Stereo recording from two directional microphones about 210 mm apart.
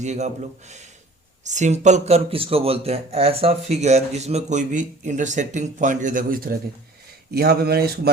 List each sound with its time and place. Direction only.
0.0 s speech: 35° right (ahead or behind)
1.5 s a man's voice: 35° right (ahead or behind)